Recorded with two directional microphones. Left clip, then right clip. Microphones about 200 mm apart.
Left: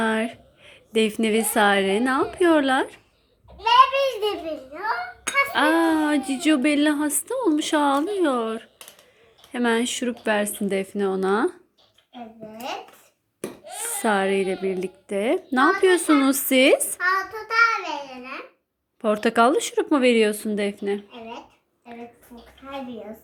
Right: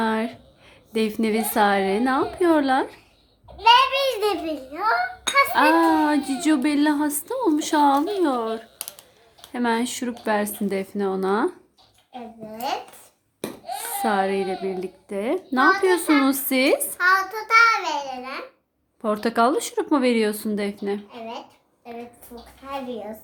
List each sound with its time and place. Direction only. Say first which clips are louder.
0.0 s a woman's voice: even; 15° left (ahead or behind)
3.6 s child singing: even; 15° right (ahead or behind)
5.5 s speech: right 1 dB; 5° left (ahead or behind)
14.0 s speech: left 1 dB; 15° left (ahead or behind)
17.0 s child singing: right 4 dB; 10° right (ahead or behind)
19.0 s speech: left 2 dB; 15° left (ahead or behind)